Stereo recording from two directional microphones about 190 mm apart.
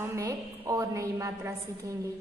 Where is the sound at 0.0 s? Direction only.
15° right (ahead or behind).